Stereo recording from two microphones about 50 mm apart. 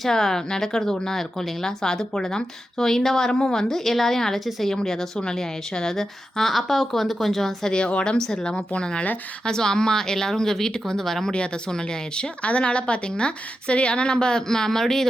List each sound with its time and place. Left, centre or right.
0.0 s a woman's voice: centre
7.7 s speech: left